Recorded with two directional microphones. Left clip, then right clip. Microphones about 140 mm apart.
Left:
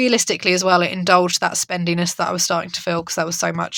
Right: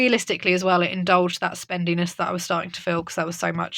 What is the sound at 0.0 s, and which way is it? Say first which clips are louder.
Speech: left 3 dB; 20° left (ahead or behind).